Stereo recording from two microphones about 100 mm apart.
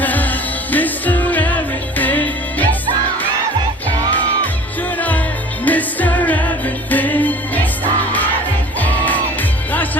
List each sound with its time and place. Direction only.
0.0 s music: 15° left (ahead or behind)
4.9 s music: 15° left (ahead or behind)
8.8 s music: 15° left (ahead or behind)